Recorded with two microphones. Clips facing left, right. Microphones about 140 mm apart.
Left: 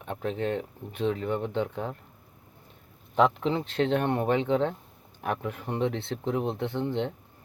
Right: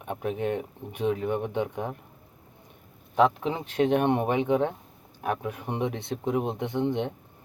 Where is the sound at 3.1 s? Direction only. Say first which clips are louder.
Even; 10° right (ahead or behind).